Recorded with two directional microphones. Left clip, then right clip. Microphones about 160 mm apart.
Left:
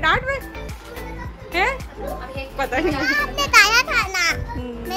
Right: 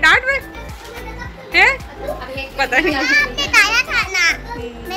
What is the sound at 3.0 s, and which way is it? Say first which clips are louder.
Children playing: right 5 dB; 90° left.